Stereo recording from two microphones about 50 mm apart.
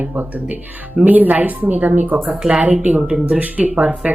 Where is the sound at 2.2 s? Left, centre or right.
Centre.